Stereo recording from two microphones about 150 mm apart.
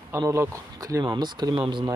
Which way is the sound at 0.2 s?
20° right (ahead or behind).